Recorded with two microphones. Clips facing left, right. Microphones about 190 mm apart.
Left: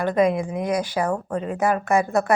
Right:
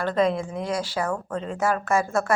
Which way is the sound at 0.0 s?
15° left (ahead or behind).